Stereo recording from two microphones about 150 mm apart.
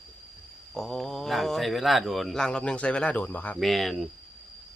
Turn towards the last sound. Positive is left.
turn(degrees=0)  # may be behind; listen again after turning